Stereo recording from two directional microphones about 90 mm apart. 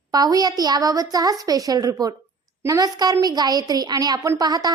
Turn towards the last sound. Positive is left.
turn(degrees=-45)  # may be behind; listen again after turning